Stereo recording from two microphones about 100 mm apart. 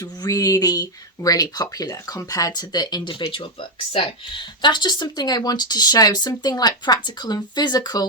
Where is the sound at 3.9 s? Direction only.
55° left (ahead or behind).